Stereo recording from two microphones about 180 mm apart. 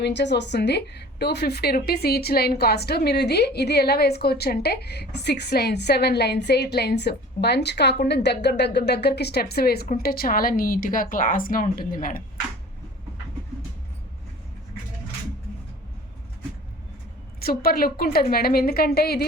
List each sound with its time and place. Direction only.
0.0 s a woman's voice: 70° left (ahead or behind); by 12.2 s 50° left (ahead or behind)
17.4 s a woman's voice: 55° left (ahead or behind)